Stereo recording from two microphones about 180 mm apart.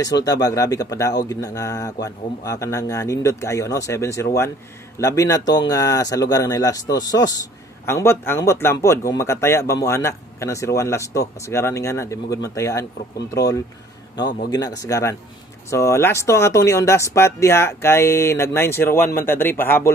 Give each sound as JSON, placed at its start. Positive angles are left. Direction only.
{"t": 0.0, "sound": "a man's voice", "side_deg": 20}